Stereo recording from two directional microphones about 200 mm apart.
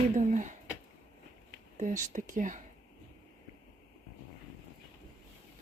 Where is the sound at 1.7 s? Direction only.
40° right (ahead or behind).